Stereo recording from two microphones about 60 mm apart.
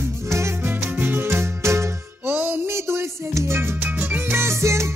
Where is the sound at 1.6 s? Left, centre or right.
Right.